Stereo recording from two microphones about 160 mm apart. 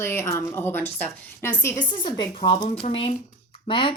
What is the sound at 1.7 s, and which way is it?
Speech, 25° left (ahead or behind).